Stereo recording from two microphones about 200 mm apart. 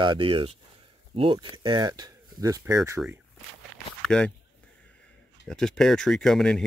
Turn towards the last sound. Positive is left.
turn(degrees=5)  # may be behind; listen again after turning